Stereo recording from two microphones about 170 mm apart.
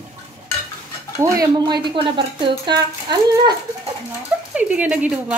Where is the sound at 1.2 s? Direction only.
20° right (ahead or behind).